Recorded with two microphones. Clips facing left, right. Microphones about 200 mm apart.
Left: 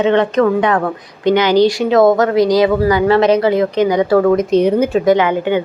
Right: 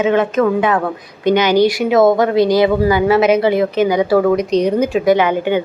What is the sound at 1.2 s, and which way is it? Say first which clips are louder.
Speech: left 1 dB; 15° right (ahead or behind).